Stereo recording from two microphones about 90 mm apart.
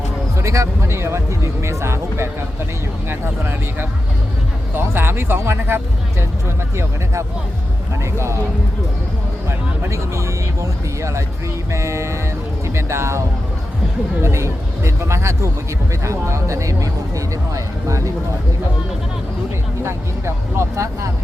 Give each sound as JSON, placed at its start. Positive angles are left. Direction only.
{"t": 0.3, "sound": "speech", "side_deg": -35}
{"t": 9.5, "sound": "speech", "side_deg": -30}
{"t": 19.8, "sound": "speech", "side_deg": -30}